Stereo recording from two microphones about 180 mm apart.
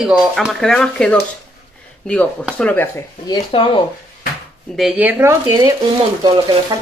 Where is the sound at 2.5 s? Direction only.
10° left (ahead or behind).